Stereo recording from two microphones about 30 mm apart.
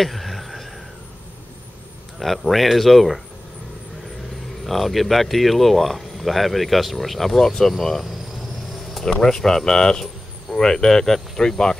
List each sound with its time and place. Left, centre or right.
0.0 s a sound: centre
2.1 s speech: centre
4.6 s speech: centre
9.0 s speech: centre